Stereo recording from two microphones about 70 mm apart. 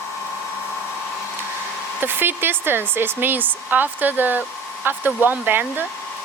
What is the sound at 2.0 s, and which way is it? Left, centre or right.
Speech, right.